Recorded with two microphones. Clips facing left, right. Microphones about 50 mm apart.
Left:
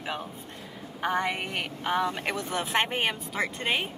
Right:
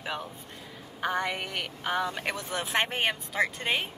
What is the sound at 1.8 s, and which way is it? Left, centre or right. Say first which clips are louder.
Speech: left 2 dB; centre.